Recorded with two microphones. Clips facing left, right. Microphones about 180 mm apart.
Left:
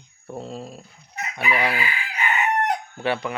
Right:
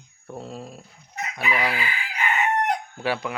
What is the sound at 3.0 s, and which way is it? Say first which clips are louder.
Speech: left 2 dB; 5° right (ahead or behind).